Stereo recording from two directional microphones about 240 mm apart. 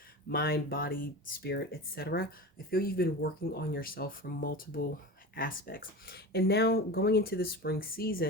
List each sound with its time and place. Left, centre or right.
0.3 s speech: left